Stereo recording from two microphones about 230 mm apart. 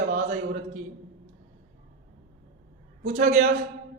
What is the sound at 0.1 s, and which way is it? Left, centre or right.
Speech, right.